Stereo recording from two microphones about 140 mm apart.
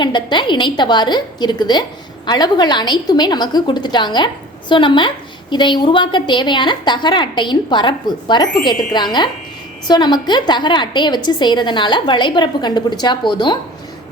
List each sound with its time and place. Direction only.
0.0 s a woman's voice: 35° left (ahead or behind)